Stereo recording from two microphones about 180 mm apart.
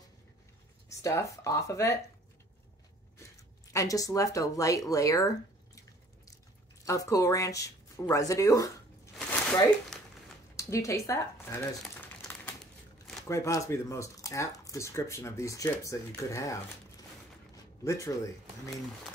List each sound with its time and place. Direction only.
0.8 s speech: 15° left (ahead or behind)
3.7 s speech: 20° left (ahead or behind)
6.8 s speech: 20° left (ahead or behind)
9.9 s a sound: 5° left (ahead or behind)
10.5 s speech: 15° left (ahead or behind)
13.3 s speech: 15° left (ahead or behind)